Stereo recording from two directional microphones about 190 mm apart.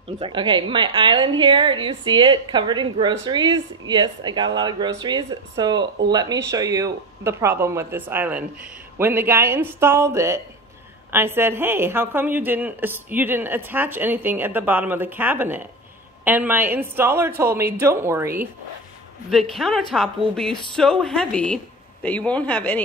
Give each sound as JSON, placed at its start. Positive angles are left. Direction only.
{"t": 0.2, "sound": "a woman's voice", "side_deg": -25}
{"t": 19.3, "sound": "a woman's voice", "side_deg": 0}